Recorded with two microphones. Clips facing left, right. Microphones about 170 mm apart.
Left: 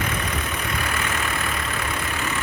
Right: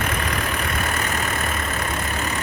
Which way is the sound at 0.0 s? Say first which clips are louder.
Right 2 dB; 55° right (ahead or behind).